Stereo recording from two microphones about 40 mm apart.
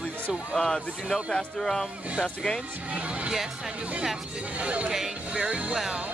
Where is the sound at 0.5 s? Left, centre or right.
Centre.